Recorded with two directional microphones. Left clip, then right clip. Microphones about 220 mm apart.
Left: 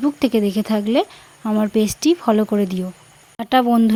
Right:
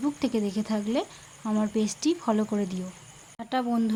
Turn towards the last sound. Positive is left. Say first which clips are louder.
# left 12 dB
turn(degrees=40)  # may be behind; listen again after turning